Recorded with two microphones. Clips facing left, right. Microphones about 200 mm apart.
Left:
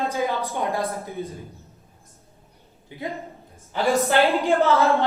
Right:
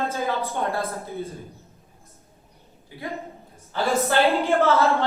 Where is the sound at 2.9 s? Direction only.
20° left (ahead or behind).